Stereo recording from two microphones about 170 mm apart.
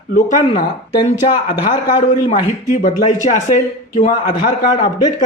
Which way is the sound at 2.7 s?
45° left (ahead or behind).